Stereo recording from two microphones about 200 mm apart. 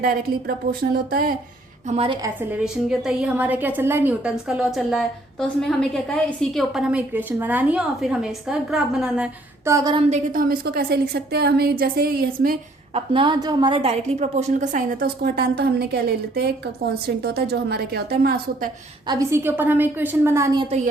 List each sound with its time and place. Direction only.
0.0 s a woman's voice: 45° right (ahead or behind)
1.9 s a woman's voice: 30° right (ahead or behind)
2.2 s a woman's voice: 5° right (ahead or behind)
10.1 s a woman's voice: 45° right (ahead or behind)
12.9 s a woman's voice: 25° right (ahead or behind); by 18.7 s 50° right (ahead or behind)
19.0 s a woman's voice: 15° right (ahead or behind)